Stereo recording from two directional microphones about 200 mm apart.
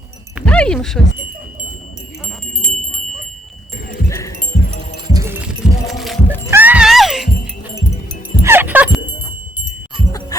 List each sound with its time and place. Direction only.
0.4 s speech: 5° left (ahead or behind)
2.2 s a sound: centre (ahead or behind)
4.1 s music: 15° left (ahead or behind)
5.0 s music: 15° right (ahead or behind); by 6.5 s 10° left (ahead or behind)
6.5 s music: 10° right (ahead or behind)
8.4 s music: 10° right (ahead or behind)
10.1 s music: 15° left (ahead or behind)